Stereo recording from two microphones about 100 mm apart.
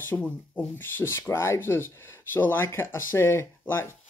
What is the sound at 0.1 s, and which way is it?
Speech, 15° left (ahead or behind).